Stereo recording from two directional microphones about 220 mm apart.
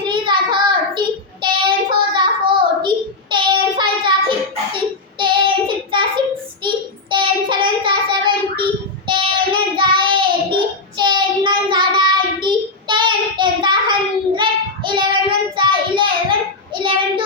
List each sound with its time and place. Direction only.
0.0 s child singing: 20° right (ahead or behind)
5.2 s child singing: 20° right (ahead or behind)